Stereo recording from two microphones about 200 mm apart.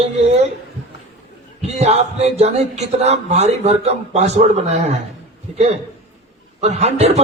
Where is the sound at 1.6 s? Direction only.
30° right (ahead or behind).